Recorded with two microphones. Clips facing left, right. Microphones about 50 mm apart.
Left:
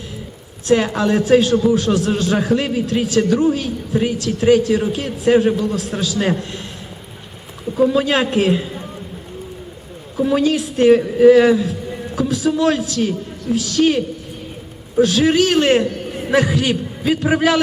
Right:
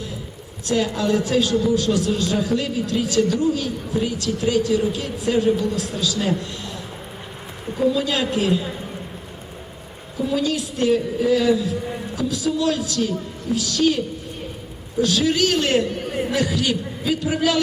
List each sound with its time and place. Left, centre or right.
0.7 s a man's voice: left
7.8 s a man's voice: left
10.2 s a man's voice: left
15.0 s a man's voice: left